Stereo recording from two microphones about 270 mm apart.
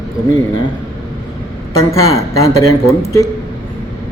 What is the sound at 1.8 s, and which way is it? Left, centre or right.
Speech, centre.